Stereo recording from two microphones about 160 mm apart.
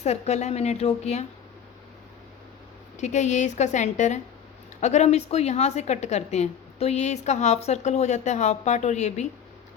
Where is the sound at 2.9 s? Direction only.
45° left (ahead or behind).